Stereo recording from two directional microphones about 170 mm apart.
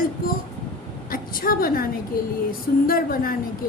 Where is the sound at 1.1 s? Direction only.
55° left (ahead or behind).